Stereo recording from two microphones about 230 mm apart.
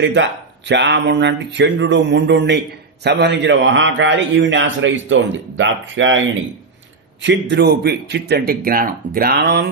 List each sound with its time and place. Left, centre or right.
0.0 s speech: right